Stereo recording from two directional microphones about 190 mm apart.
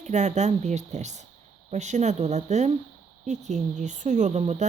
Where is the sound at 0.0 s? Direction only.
35° right (ahead or behind).